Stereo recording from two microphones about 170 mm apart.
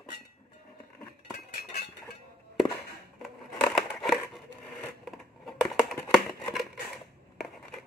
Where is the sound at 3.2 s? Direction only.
Centre (ahead or behind).